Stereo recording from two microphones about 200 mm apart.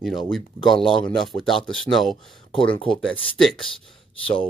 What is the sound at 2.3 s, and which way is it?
Speech, 25° left (ahead or behind).